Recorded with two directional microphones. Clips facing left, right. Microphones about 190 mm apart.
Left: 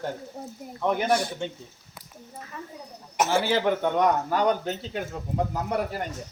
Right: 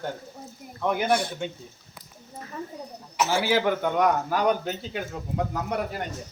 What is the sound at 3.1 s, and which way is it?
Speech, 50° left (ahead or behind).